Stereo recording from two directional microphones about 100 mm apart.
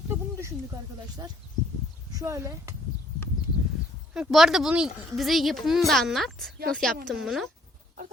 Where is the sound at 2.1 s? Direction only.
30° right (ahead or behind).